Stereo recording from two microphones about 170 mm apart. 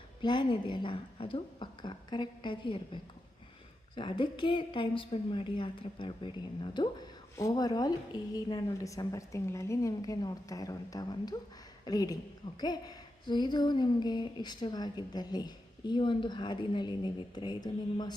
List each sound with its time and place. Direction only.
0.2 s a woman's voice: 25° left (ahead or behind)